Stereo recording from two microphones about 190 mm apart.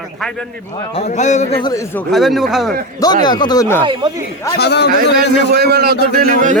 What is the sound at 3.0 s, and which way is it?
Speech, 20° left (ahead or behind).